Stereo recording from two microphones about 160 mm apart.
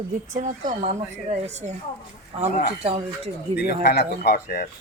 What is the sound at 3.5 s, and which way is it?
Speech, 90° left.